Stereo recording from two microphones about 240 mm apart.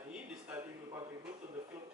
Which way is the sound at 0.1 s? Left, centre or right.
Centre.